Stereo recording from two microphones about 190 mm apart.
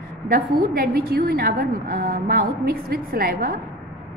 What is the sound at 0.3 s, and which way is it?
A woman's voice, 55° right (ahead or behind).